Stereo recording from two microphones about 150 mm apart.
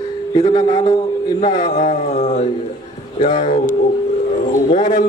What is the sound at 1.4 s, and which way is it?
Speech, 50° left (ahead or behind).